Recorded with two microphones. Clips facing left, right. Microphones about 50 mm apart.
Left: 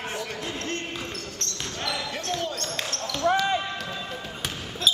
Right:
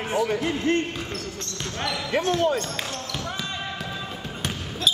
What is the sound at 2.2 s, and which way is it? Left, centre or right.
Speech, centre.